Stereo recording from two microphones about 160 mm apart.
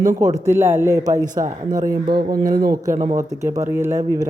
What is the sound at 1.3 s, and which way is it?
Speech, 55° right (ahead or behind).